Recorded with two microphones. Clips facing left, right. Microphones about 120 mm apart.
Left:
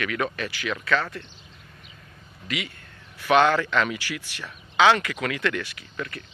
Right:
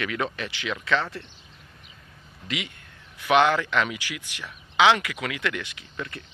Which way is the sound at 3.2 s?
15° right (ahead or behind).